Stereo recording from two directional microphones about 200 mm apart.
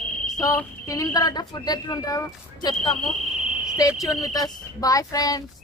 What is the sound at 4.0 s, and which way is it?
Speech, 20° left (ahead or behind).